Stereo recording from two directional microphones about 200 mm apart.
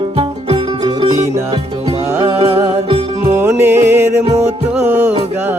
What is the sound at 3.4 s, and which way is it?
Music, 10° right (ahead or behind).